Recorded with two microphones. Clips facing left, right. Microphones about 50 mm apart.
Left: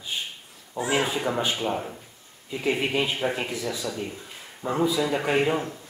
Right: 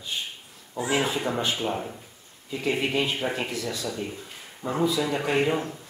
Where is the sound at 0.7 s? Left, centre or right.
Centre.